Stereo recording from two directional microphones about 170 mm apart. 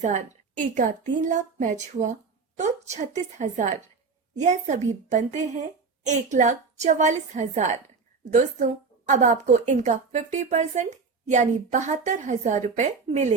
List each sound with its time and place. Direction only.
0.0 s a woman's voice: 45° right (ahead or behind)